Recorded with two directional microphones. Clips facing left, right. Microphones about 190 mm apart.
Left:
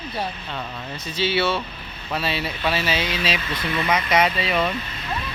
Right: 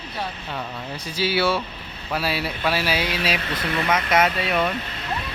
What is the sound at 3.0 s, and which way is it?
Speech, 60° right (ahead or behind).